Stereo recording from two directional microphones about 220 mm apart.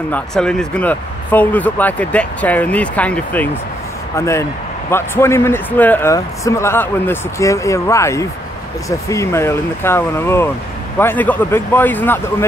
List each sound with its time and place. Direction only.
0.1 s speech: 5° left (ahead or behind)